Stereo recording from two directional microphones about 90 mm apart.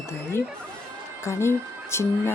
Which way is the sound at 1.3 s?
30° left (ahead or behind).